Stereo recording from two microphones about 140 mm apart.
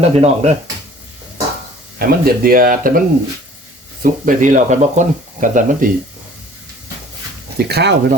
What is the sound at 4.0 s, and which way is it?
Speech, 70° right (ahead or behind).